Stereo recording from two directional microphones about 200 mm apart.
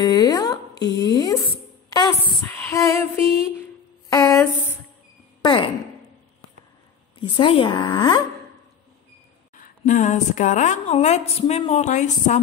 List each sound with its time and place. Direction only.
0.0 s speech: 15° left (ahead or behind)
4.1 s a sound: 15° left (ahead or behind)
5.4 s speech: 25° left (ahead or behind)
7.2 s speech: 25° left (ahead or behind)
9.6 s a woman's voice: 40° left (ahead or behind)